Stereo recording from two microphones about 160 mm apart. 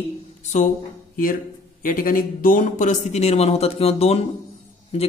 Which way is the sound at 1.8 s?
60° left (ahead or behind).